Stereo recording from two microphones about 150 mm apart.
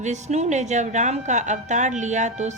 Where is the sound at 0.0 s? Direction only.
50° right (ahead or behind).